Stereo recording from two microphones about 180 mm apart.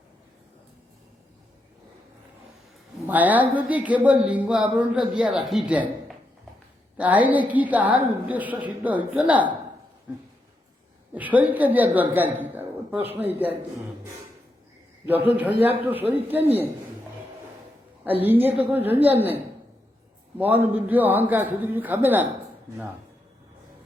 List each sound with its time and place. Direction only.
3.1 s speech: 10° right (ahead or behind)
11.1 s speech: 10° right (ahead or behind)
15.2 s speech: 10° right (ahead or behind)
18.2 s speech: 10° right (ahead or behind)
20.4 s speech: 10° right (ahead or behind)